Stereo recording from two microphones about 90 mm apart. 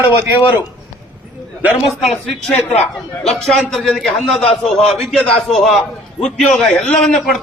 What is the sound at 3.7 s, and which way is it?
A man's voice, 5° left (ahead or behind).